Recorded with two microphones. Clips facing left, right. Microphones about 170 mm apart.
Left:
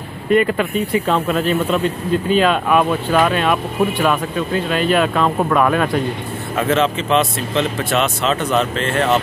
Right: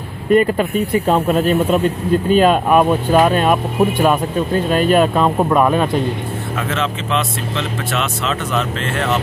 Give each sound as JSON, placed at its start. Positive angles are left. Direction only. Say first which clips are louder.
{"t": 0.3, "sound": "speech", "louder": "right 2 dB", "side_deg": -40}
{"t": 5.2, "sound": "speech", "louder": "right 2 dB", "side_deg": -15}
{"t": 6.7, "sound": "speech", "louder": "left 6 dB", "side_deg": 40}
{"t": 8.0, "sound": "speech", "louder": "left 3 dB", "side_deg": 0}